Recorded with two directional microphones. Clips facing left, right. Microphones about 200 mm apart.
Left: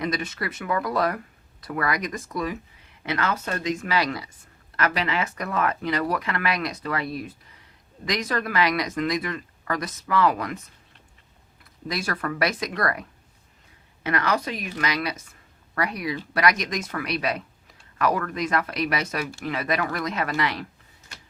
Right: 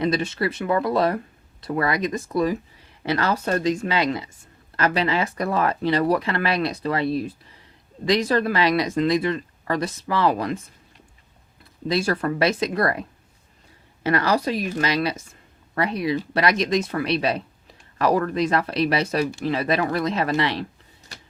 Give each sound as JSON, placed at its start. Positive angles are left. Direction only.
{"t": 0.0, "sound": "speech", "side_deg": -30}
{"t": 11.9, "sound": "a woman's voice", "side_deg": -25}